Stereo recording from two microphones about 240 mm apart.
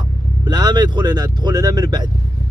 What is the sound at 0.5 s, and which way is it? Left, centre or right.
Speech, centre.